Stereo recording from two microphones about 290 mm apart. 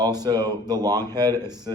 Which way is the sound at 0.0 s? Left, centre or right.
Centre.